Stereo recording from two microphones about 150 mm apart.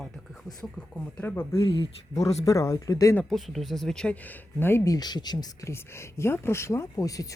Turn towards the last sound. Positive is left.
turn(degrees=25)  # may be behind; listen again after turning